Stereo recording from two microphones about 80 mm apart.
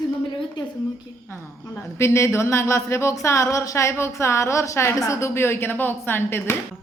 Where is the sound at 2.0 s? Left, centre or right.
Left.